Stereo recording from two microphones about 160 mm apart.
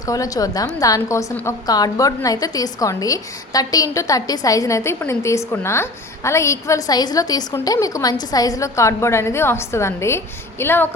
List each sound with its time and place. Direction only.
0.0 s a woman's voice: 20° left (ahead or behind)